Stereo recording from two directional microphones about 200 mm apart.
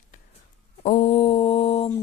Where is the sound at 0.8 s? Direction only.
35° left (ahead or behind).